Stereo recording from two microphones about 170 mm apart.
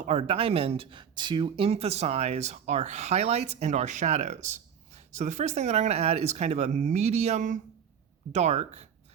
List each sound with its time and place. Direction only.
0.0 s speech: 40° right (ahead or behind)